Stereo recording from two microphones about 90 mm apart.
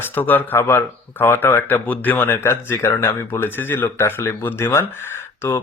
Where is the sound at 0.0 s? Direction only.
20° left (ahead or behind).